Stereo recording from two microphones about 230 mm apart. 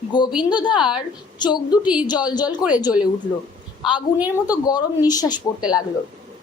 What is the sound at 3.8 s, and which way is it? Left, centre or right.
Speech, centre.